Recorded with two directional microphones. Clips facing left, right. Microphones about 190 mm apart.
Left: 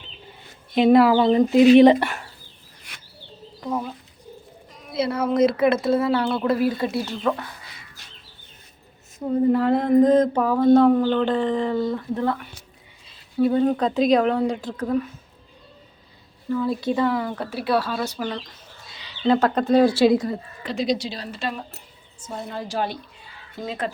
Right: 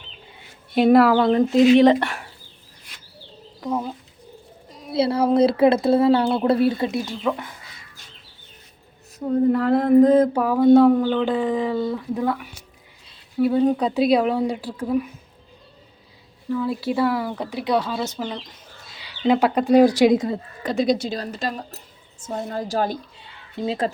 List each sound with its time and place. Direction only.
0.8 s a sound: centre (ahead or behind)
1.8 s speech: 15° left (ahead or behind)
4.7 s speech: 30° right (ahead or behind); by 7.4 s 10° right (ahead or behind)
9.1 s a sound: 5° left (ahead or behind)
13.1 s a woman's voice: 5° right (ahead or behind)
16.5 s a woman's voice: 5° right (ahead or behind); by 20.3 s 20° right (ahead or behind)
20.7 s speech: 50° right (ahead or behind)
23.6 s speech: 30° right (ahead or behind)